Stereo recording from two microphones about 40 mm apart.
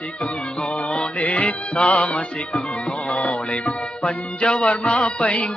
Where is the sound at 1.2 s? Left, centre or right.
Left.